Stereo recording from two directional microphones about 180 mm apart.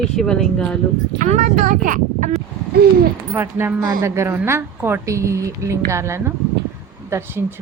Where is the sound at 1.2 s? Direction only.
45° right (ahead or behind).